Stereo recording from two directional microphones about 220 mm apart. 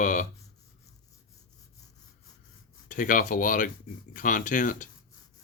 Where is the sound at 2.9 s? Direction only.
40° left (ahead or behind).